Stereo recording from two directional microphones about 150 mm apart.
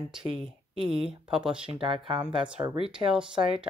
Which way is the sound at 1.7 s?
35° right (ahead or behind).